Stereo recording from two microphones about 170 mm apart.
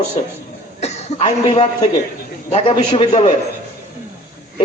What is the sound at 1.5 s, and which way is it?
A man's voice, 30° left (ahead or behind).